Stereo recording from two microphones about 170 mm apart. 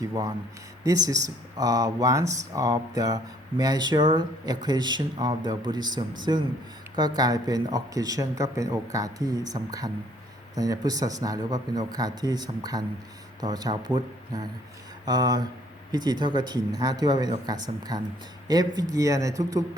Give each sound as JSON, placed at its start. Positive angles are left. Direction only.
{"t": 0.9, "sound": "speech", "side_deg": -20}